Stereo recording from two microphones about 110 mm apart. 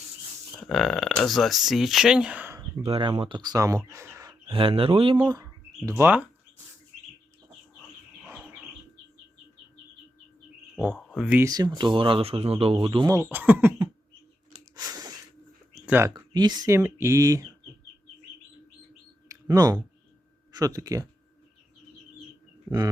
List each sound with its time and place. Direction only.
0.6 s speech: centre (ahead or behind)
2.8 s speech: 55° right (ahead or behind); by 4.4 s 25° right (ahead or behind)
4.4 s speech: 55° right (ahead or behind)
5.3 s speech: 30° right (ahead or behind)
10.9 s speech: 5° right (ahead or behind)
11.4 s speech: 35° right (ahead or behind); by 13.1 s 50° right (ahead or behind)
13.3 s speech: 15° right (ahead or behind)
14.8 s a sound: 35° right (ahead or behind)
15.9 s speech: 20° right (ahead or behind)
16.1 s speech: 40° right (ahead or behind)
16.6 s speech: 25° right (ahead or behind)
19.3 s a sound: 35° right (ahead or behind)
20.5 s speech: 35° right (ahead or behind)